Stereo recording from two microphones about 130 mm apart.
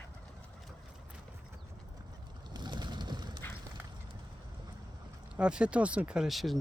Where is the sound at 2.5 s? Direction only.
35° right (ahead or behind).